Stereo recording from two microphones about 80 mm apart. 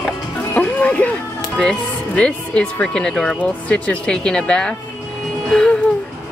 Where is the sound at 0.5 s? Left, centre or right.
Centre.